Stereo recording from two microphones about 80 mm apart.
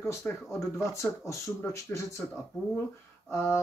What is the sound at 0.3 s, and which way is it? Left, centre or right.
Speech, left.